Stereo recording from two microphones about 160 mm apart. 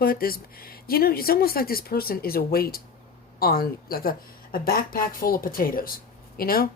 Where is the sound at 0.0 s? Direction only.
70° left (ahead or behind).